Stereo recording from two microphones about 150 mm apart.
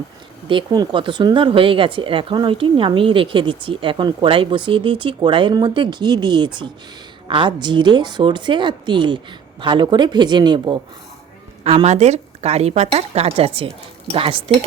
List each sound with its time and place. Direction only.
0.4 s speech: 30° right (ahead or behind)
11.6 s a woman's voice: 45° right (ahead or behind)